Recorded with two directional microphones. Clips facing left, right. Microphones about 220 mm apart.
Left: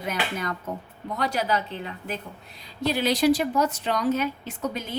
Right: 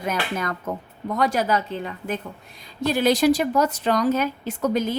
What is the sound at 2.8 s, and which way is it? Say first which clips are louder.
A woman's voice: right 3 dB; 50° right (ahead or behind).